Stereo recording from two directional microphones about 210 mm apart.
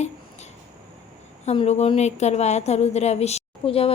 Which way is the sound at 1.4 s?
30° left (ahead or behind).